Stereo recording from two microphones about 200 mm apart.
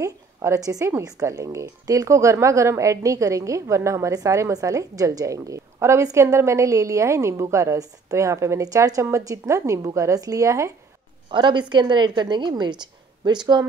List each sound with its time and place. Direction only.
0.0 s a woman's voice: 15° right (ahead or behind)